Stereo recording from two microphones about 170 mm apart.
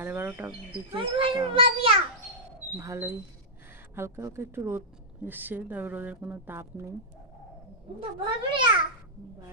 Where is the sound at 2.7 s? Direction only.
15° right (ahead or behind).